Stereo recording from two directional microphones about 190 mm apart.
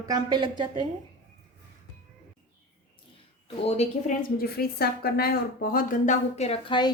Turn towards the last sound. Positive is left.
turn(degrees=25)  # may be behind; listen again after turning